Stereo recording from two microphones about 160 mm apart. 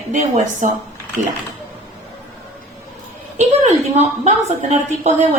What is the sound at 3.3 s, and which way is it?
A woman's voice, 45° right (ahead or behind).